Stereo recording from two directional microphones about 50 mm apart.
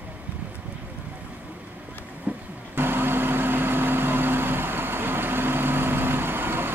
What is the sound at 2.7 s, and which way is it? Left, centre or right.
Vehicle, right.